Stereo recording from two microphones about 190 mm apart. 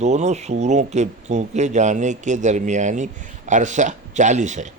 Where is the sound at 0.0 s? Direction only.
35° right (ahead or behind).